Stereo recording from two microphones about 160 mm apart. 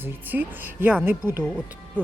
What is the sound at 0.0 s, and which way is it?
Speech, 10° right (ahead or behind).